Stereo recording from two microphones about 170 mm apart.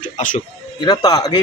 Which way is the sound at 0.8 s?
25° left (ahead or behind).